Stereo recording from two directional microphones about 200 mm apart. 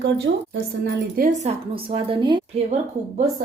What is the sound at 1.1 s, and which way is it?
A woman's voice, 40° right (ahead or behind).